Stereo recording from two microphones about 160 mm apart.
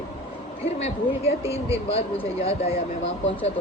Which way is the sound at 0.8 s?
40° left (ahead or behind).